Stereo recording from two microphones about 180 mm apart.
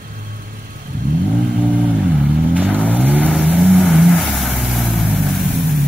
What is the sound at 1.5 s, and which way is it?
Vehicle, 5° right (ahead or behind).